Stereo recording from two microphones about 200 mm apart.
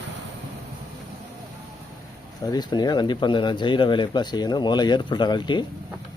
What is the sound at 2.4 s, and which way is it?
Speech, 20° left (ahead or behind).